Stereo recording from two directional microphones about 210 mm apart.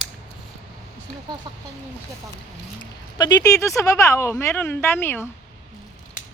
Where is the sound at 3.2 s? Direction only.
15° left (ahead or behind).